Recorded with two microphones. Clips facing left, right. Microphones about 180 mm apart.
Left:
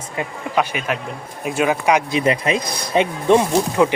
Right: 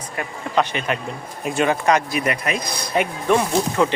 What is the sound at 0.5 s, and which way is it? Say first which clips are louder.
Speech: even; 10° left (ahead or behind).